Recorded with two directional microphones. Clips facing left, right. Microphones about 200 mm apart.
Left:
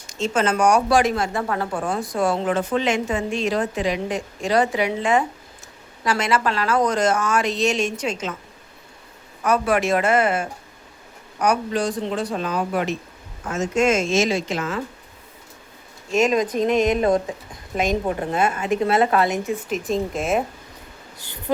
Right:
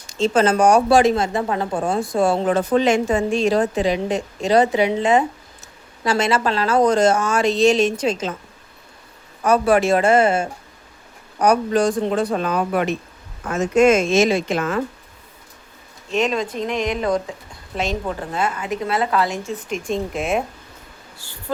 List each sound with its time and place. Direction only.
0.1 s a woman's voice: 35° right (ahead or behind)
9.4 s speech: 30° right (ahead or behind)
11.3 s a woman's voice: 40° right (ahead or behind); by 14.8 s 55° right (ahead or behind)
16.1 s a woman's voice: 10° left (ahead or behind)
19.6 s a woman's voice: centre (ahead or behind)
21.2 s a sound: 20° left (ahead or behind)